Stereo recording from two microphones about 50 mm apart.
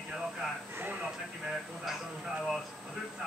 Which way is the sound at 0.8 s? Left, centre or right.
Right.